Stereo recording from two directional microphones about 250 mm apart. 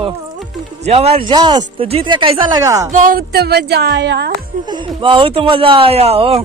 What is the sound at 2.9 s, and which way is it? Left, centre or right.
A woman's voice, right.